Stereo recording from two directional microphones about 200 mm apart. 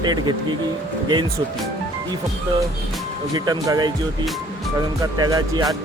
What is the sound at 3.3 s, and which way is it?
Speech, 20° right (ahead or behind).